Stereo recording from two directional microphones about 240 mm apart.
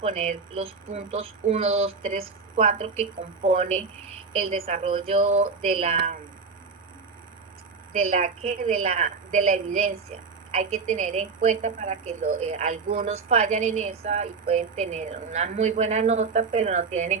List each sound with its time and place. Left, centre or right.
0.6 s a woman's voice: right
4.4 s a woman's voice: right
8.1 s a woman's voice: right